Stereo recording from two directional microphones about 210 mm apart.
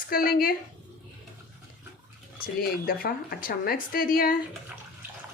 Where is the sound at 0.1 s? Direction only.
45° left (ahead or behind).